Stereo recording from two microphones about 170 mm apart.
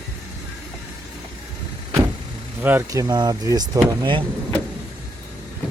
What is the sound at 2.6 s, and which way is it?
Speech, 10° right (ahead or behind).